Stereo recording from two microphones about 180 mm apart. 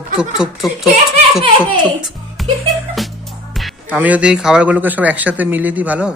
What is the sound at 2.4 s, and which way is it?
Music, centre (ahead or behind).